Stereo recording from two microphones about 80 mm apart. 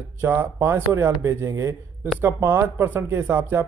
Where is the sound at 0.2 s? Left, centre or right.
Right.